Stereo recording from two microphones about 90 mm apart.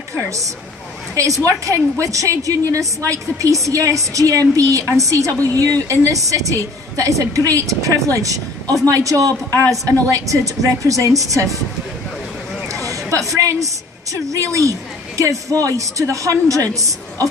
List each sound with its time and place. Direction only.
0.1 s a woman's voice: 35° right (ahead or behind)
13.3 s a woman's voice: 35° right (ahead or behind)